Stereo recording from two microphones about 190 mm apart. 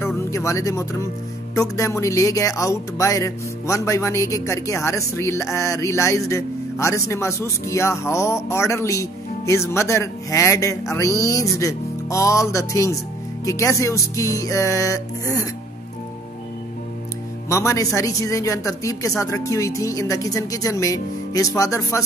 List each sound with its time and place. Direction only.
0.0 s speech: 15° left (ahead or behind)
17.5 s speech: 15° left (ahead or behind)